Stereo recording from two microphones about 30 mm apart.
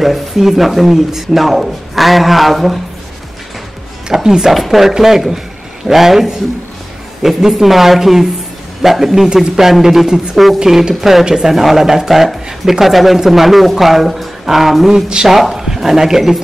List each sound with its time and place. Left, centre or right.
0.0 s speech: centre
4.2 s speech: centre
4.5 s speech: centre
12.8 s speech: centre